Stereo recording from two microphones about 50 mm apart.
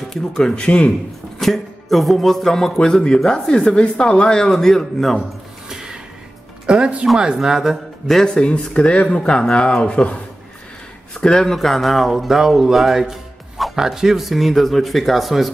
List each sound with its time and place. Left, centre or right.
0.1 s speech: centre
0.7 s speech: left
1.4 s speech: centre
5.7 s a sound: centre
6.6 s speech: centre
8.2 s speech: centre